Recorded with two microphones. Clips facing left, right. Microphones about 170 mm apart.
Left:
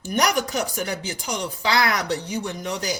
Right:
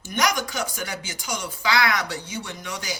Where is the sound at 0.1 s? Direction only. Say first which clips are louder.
Left 3 dB; 40° left (ahead or behind).